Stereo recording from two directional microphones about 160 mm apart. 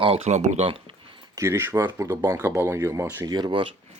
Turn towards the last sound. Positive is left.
turn(degrees=-30)  # may be behind; listen again after turning